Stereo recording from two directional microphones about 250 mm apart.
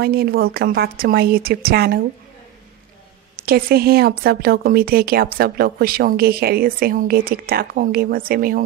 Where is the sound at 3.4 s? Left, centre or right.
Right.